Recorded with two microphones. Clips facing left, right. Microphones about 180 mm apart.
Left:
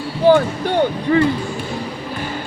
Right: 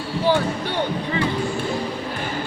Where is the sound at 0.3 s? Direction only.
50° left (ahead or behind).